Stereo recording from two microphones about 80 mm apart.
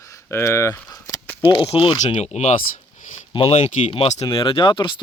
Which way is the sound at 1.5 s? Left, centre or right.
Left.